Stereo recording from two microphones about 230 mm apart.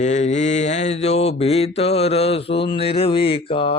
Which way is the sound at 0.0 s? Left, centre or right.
Left.